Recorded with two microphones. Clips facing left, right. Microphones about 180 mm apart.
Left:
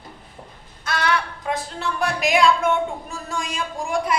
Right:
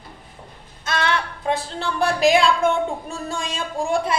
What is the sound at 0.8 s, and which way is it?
Speech, 25° right (ahead or behind).